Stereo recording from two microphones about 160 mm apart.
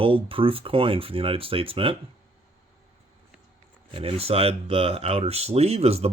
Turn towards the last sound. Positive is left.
turn(degrees=-40)  # may be behind; listen again after turning